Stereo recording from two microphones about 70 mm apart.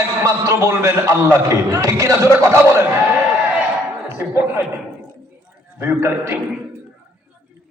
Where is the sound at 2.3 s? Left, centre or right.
Right.